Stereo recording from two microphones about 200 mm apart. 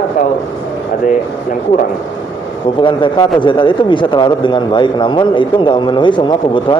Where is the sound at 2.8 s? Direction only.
25° left (ahead or behind).